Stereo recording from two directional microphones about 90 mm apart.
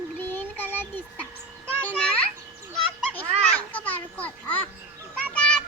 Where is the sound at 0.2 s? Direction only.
20° left (ahead or behind).